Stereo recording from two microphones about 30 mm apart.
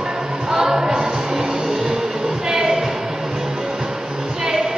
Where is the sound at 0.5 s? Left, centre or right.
Centre.